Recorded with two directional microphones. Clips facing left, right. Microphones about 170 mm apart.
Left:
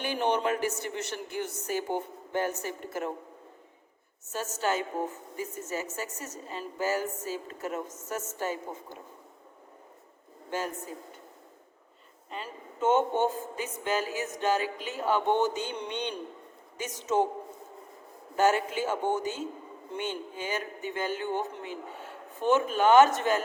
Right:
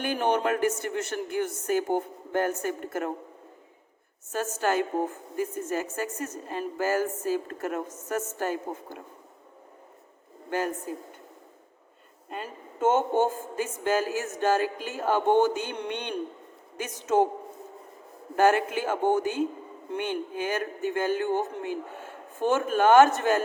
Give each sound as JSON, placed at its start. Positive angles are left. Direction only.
{"t": 0.0, "sound": "a woman's voice", "side_deg": -50}
{"t": 4.3, "sound": "a woman's voice", "side_deg": -55}
{"t": 12.3, "sound": "a woman's voice", "side_deg": -50}
{"t": 18.3, "sound": "a man's voice", "side_deg": -55}